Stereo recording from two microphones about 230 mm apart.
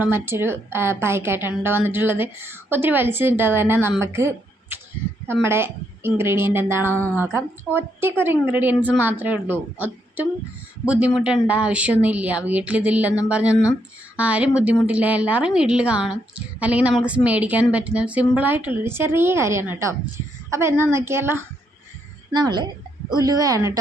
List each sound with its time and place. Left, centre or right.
0.0 s a woman's voice: centre